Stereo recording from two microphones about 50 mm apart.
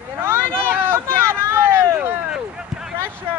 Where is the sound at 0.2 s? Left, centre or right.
Right.